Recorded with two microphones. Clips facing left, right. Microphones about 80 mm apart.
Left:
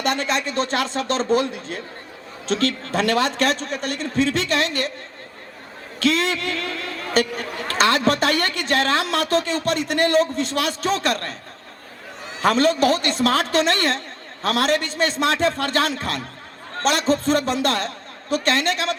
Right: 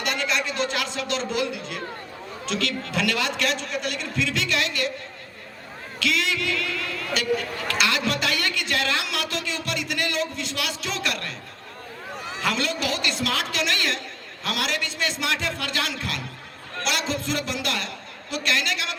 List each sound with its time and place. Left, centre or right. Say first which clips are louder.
0.0 s a man's voice: left 4 dB; left
6.0 s a man's voice: left 5 dB; left
12.4 s a man's voice: left 9 dB; left